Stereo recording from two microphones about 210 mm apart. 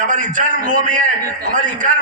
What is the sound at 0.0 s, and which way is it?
A man's voice, 35° right (ahead or behind).